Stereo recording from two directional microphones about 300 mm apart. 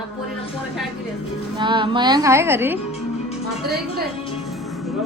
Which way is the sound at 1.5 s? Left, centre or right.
Centre.